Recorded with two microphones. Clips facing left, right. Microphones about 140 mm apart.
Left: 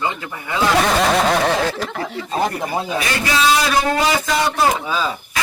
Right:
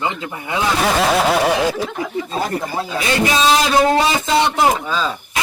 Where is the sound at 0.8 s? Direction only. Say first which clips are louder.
Right 1 dB; 5° right (ahead or behind).